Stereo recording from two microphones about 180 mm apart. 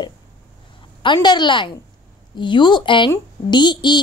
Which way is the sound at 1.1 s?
25° left (ahead or behind).